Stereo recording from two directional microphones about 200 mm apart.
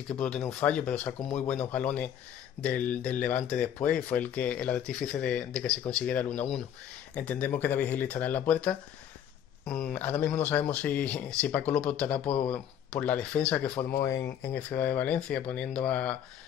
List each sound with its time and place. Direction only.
0.1 s speech: 5° left (ahead or behind)